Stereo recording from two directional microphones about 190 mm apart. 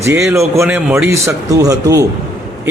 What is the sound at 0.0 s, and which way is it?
Speech, 15° right (ahead or behind).